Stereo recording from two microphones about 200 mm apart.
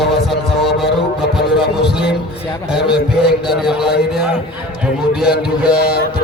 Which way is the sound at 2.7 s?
55° left (ahead or behind).